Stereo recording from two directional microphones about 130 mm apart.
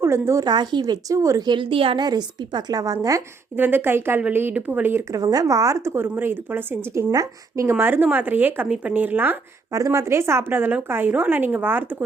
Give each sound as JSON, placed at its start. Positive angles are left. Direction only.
{"t": 0.0, "sound": "speech", "side_deg": -20}
{"t": 2.0, "sound": "speech", "side_deg": -30}
{"t": 3.6, "sound": "speech", "side_deg": -15}
{"t": 5.2, "sound": "speech", "side_deg": -30}
{"t": 9.7, "sound": "speech", "side_deg": -25}